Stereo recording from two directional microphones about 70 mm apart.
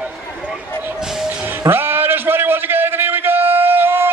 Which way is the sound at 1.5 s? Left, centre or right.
Right.